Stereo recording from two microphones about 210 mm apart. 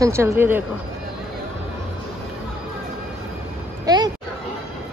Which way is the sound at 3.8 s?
20° right (ahead or behind).